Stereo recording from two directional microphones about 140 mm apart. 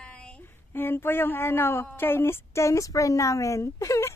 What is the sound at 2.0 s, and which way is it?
A woman's voice, 15° left (ahead or behind).